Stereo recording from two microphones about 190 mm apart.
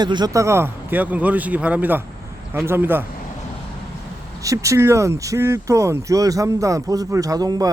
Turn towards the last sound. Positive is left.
turn(degrees=-20)  # may be behind; listen again after turning